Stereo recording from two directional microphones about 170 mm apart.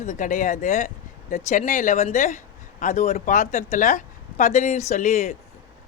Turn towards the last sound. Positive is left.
turn(degrees=45)  # may be behind; listen again after turning